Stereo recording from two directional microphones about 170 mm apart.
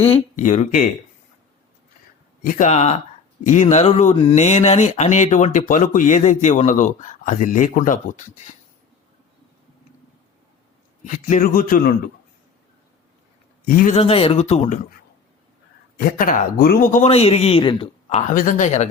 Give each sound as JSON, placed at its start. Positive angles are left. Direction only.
{"t": 0.3, "sound": "speech", "side_deg": 45}
{"t": 2.4, "sound": "a man's voice", "side_deg": 50}
{"t": 11.0, "sound": "speech", "side_deg": 45}
{"t": 13.7, "sound": "speech", "side_deg": 50}
{"t": 13.9, "sound": "a man's voice", "side_deg": 35}
{"t": 16.0, "sound": "a man's voice", "side_deg": 60}
{"t": 18.3, "sound": "speech", "side_deg": 50}